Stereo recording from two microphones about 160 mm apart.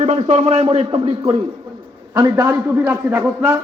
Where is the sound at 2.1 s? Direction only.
25° right (ahead or behind).